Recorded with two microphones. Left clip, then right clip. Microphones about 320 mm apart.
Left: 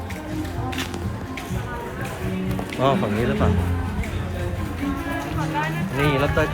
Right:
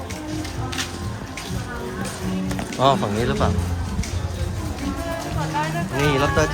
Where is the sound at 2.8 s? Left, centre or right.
Centre.